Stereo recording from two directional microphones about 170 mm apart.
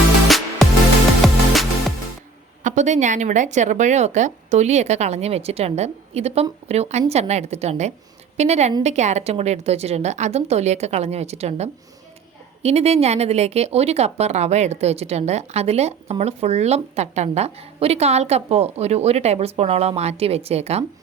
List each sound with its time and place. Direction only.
0.3 s music: centre (ahead or behind)
2.6 s speech: 45° right (ahead or behind)